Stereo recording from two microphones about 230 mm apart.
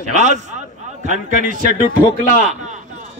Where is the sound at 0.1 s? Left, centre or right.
Right.